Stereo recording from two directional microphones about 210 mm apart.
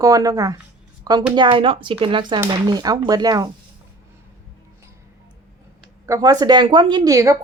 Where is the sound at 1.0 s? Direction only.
20° right (ahead or behind).